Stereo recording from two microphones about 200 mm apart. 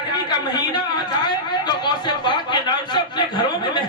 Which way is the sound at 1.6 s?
20° left (ahead or behind).